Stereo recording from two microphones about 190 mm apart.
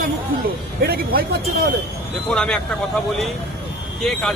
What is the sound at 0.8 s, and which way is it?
Speech, 55° right (ahead or behind).